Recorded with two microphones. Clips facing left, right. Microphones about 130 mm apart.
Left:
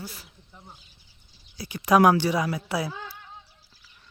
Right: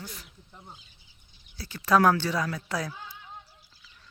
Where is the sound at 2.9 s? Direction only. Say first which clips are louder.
Left 5 dB; 90° left.